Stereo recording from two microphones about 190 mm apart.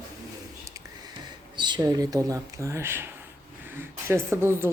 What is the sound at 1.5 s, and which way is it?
Speech, 25° right (ahead or behind).